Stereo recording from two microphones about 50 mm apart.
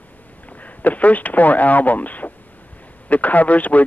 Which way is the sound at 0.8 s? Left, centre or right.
Left.